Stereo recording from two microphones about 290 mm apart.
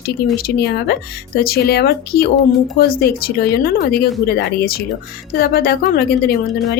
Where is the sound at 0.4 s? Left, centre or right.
Left.